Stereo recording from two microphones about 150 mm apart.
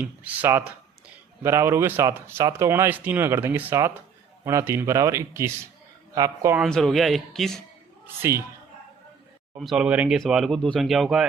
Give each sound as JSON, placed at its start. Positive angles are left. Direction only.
{"t": 0.0, "sound": "speech", "side_deg": -10}
{"t": 6.6, "sound": "speech", "side_deg": 5}
{"t": 8.0, "sound": "speech", "side_deg": -15}
{"t": 9.6, "sound": "speech", "side_deg": 0}